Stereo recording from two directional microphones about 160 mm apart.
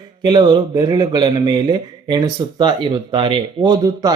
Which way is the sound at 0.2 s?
25° right (ahead or behind).